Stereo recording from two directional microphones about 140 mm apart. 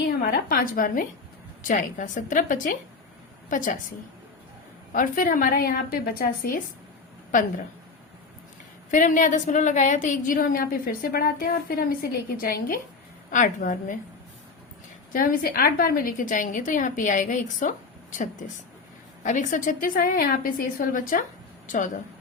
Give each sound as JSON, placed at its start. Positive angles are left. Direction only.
{"t": 0.2, "sound": "a woman's voice", "side_deg": 90}
{"t": 1.6, "sound": "a woman's voice", "side_deg": 70}
{"t": 4.9, "sound": "a woman's voice", "side_deg": 70}
{"t": 8.9, "sound": "a woman's voice", "side_deg": 65}
{"t": 13.3, "sound": "a woman's voice", "side_deg": 70}
{"t": 15.1, "sound": "a woman's voice", "side_deg": 85}